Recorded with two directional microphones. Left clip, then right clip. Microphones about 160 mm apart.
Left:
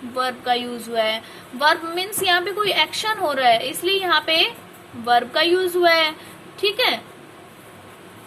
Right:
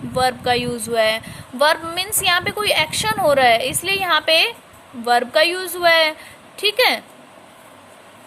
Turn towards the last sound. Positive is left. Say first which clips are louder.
# right 3 dB
turn(degrees=-50)  # may be behind; listen again after turning